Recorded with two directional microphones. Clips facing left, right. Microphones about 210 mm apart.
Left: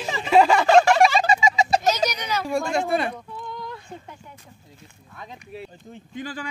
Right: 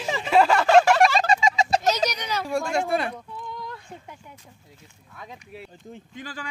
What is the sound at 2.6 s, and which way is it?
Speech, 10° right (ahead or behind).